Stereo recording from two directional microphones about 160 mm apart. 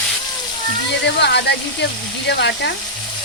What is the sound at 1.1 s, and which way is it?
Speech, 90° left.